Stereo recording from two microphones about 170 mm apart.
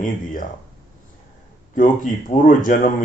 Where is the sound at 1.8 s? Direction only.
50° left (ahead or behind).